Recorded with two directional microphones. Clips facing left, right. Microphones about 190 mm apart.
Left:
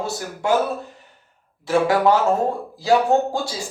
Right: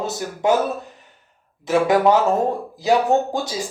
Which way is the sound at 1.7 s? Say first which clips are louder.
Right 1 dB; 20° right (ahead or behind).